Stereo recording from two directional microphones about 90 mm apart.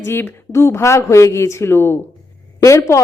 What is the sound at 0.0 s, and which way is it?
A woman's voice, 30° left (ahead or behind).